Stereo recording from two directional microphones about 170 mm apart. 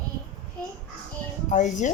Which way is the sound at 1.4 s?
45° left (ahead or behind).